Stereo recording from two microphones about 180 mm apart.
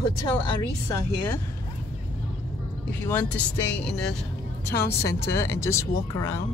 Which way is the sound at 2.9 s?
10° left (ahead or behind).